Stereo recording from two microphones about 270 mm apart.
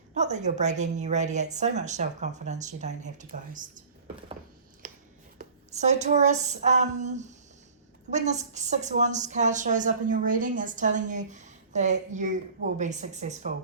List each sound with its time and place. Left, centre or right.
0.1 s a woman's voice: right
5.7 s a woman's voice: right